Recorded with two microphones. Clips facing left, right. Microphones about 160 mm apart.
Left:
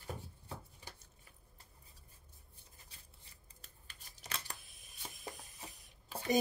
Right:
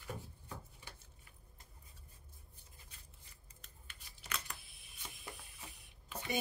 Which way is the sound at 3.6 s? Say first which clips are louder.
Even; 35° left (ahead or behind).